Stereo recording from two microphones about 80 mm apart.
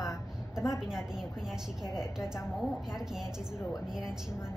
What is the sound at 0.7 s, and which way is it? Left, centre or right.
A woman's voice, centre.